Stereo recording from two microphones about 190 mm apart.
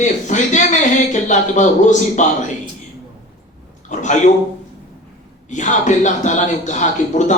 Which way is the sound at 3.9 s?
40° left (ahead or behind).